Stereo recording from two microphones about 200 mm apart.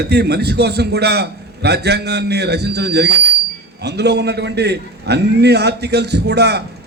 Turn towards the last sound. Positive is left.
turn(degrees=-55)  # may be behind; listen again after turning